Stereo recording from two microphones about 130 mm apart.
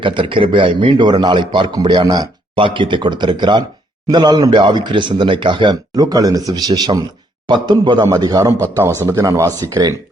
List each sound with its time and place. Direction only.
0.0 s a man's voice: 40° right (ahead or behind)